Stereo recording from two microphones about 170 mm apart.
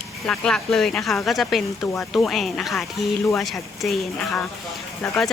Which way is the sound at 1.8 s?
15° left (ahead or behind).